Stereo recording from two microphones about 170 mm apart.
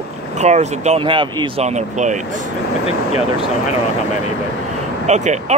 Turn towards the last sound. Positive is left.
turn(degrees=-40)  # may be behind; listen again after turning